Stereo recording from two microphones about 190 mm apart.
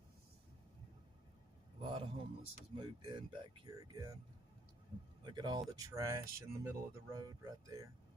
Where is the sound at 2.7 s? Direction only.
25° right (ahead or behind).